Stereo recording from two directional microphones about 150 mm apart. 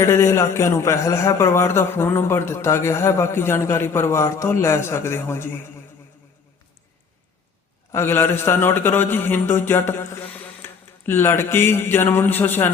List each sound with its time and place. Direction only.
0.0 s a man's voice: 20° left (ahead or behind)
7.9 s a man's voice: 15° left (ahead or behind)